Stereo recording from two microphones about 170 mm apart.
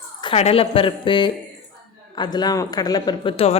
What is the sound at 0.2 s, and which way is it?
A woman's voice, 35° left (ahead or behind).